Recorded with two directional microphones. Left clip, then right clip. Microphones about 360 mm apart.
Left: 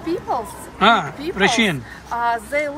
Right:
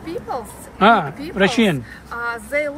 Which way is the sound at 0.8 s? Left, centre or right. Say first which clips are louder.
Right 1 dB; centre.